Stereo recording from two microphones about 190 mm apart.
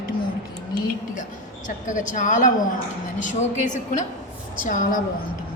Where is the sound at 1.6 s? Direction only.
45° left (ahead or behind).